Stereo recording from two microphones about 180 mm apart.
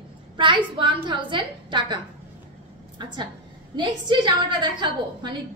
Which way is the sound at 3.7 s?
25° right (ahead or behind).